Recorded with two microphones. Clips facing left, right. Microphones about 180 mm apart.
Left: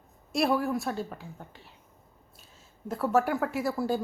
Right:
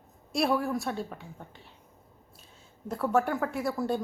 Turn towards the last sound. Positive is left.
turn(degrees=5)  # may be behind; listen again after turning